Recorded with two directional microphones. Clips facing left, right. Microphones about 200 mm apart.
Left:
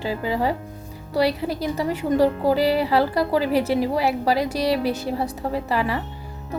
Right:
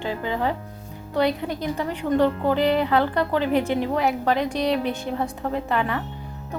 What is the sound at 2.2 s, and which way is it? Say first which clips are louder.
A woman's voice: left 2 dB; 5° left (ahead or behind).